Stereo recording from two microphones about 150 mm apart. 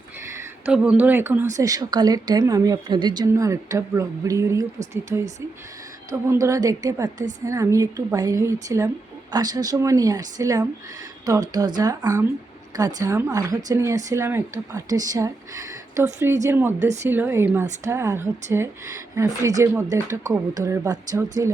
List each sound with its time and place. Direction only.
0.2 s a sound: 20° right (ahead or behind)
0.7 s speech: 5° right (ahead or behind)
1.5 s speech: 25° right (ahead or behind)